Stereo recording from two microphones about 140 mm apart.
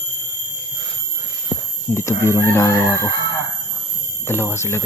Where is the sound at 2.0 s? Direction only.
20° left (ahead or behind).